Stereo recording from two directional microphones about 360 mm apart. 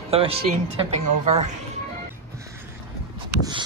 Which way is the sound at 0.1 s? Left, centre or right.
Centre.